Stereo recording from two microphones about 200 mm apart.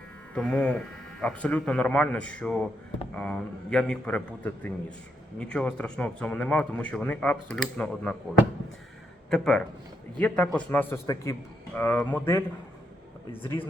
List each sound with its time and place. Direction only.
0.3 s a man's voice: 5° left (ahead or behind)
9.3 s a man's voice: 5° left (ahead or behind)